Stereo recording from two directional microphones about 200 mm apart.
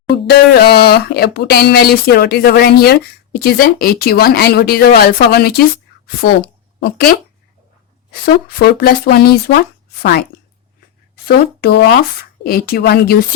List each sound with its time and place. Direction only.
0.1 s speech: 50° left (ahead or behind)
8.2 s speech: 50° left (ahead or behind)
11.3 s speech: 55° left (ahead or behind)